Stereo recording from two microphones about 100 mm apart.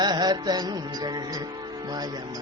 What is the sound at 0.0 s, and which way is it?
Music, 45° right (ahead or behind).